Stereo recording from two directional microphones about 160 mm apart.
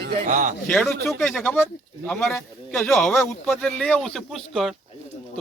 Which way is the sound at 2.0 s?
15° left (ahead or behind).